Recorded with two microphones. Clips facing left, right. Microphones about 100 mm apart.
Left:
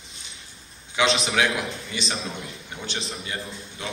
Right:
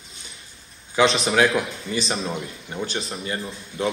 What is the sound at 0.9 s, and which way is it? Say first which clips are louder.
A man's voice: right 4 dB; 35° right (ahead or behind).